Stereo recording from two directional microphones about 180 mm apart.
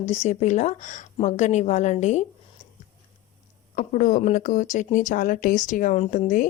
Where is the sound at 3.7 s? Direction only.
45° left (ahead or behind).